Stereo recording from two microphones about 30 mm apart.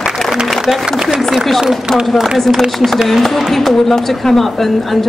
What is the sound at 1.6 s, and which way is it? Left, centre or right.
Speech, centre.